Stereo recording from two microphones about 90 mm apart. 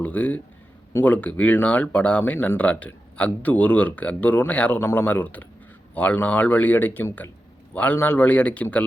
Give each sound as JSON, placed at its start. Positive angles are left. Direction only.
{"t": 0.0, "sound": "speech", "side_deg": 15}
{"t": 4.8, "sound": "a man's voice", "side_deg": 25}